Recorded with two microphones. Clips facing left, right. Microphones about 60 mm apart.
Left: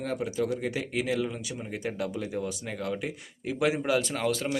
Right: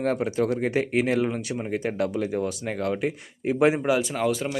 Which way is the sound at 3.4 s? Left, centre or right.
Right.